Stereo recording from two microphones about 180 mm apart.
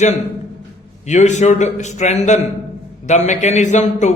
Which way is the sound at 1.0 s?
40° left (ahead or behind).